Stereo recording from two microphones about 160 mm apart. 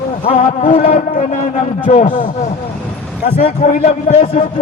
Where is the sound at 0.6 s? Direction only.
55° left (ahead or behind).